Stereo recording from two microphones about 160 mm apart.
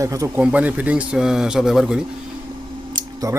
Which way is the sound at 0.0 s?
20° right (ahead or behind).